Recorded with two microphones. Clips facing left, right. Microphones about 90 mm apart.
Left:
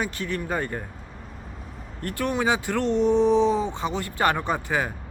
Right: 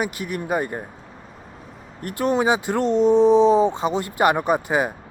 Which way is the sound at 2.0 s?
20° right (ahead or behind).